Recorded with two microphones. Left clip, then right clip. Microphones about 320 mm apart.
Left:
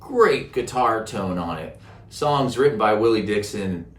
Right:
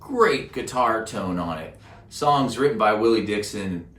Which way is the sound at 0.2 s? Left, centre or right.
Centre.